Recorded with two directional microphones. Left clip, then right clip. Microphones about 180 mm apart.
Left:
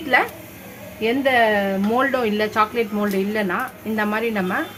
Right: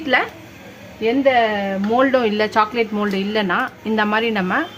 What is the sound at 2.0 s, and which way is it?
A woman's voice, 30° right (ahead or behind).